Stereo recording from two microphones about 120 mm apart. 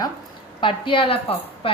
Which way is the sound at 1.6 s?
50° left (ahead or behind).